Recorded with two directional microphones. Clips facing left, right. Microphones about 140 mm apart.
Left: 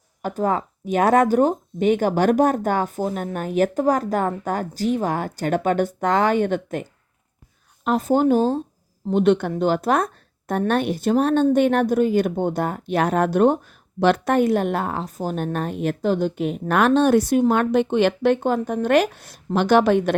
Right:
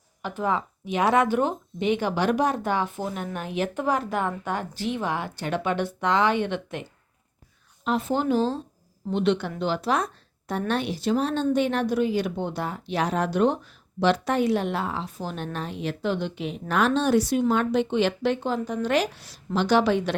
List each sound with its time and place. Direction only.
0.2 s speech: 45° left (ahead or behind)
7.9 s speech: 45° left (ahead or behind)